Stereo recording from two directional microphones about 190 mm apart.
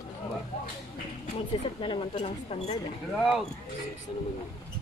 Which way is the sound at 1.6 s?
25° left (ahead or behind).